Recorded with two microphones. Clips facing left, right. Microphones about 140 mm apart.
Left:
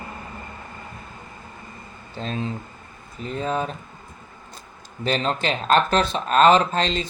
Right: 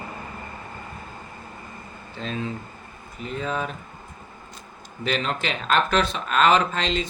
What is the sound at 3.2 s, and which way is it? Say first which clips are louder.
Speech: left 3 dB; 35° left (ahead or behind).